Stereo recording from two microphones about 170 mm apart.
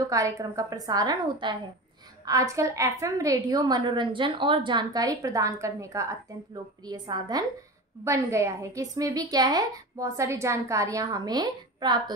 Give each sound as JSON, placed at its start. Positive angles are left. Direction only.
{"t": 0.0, "sound": "a woman's voice", "side_deg": -20}